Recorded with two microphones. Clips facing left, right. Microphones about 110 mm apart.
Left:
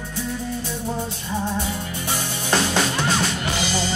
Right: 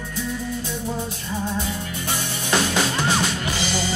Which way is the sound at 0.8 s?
20° left (ahead or behind).